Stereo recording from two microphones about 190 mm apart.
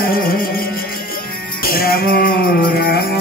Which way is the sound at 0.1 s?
50° left (ahead or behind).